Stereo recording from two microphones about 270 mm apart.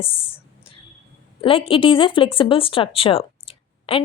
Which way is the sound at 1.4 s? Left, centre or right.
Centre.